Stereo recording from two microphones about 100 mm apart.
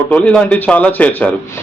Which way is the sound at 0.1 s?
10° left (ahead or behind).